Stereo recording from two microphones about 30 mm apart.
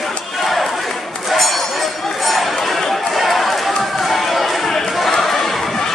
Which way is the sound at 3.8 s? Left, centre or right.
Centre.